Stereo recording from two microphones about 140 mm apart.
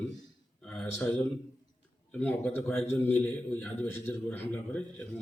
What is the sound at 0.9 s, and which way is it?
A man's voice, 10° left (ahead or behind).